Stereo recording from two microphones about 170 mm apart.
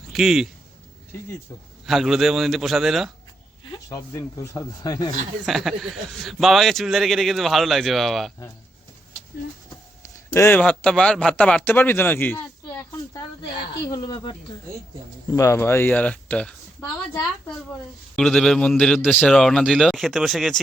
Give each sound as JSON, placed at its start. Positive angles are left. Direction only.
{"t": 0.1, "sound": "speech", "side_deg": 0}
{"t": 1.9, "sound": "a man's voice", "side_deg": 0}
{"t": 3.7, "sound": "speech", "side_deg": 20}
{"t": 5.5, "sound": "a man's voice", "side_deg": 0}
{"t": 10.3, "sound": "a man's voice", "side_deg": 10}
{"t": 13.4, "sound": "a man's voice", "side_deg": 25}
{"t": 18.2, "sound": "a man's voice", "side_deg": 5}